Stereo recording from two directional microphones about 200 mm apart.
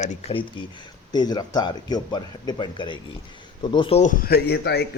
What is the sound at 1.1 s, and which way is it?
Speech, 20° left (ahead or behind).